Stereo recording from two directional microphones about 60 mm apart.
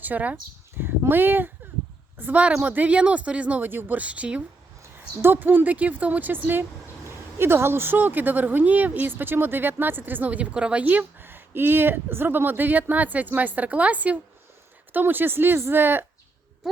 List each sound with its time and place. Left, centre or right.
0.0 s speech: right
0.8 s speech: right
2.3 s speech: centre
4.8 s speech: right